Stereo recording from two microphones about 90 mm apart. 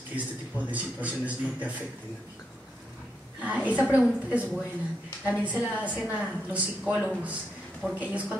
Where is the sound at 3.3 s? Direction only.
15° right (ahead or behind).